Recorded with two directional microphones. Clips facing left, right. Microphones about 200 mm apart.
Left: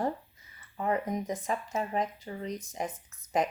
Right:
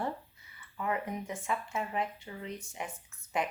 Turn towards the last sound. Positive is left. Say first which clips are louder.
# left 5 dB
turn(degrees=40)  # may be behind; listen again after turning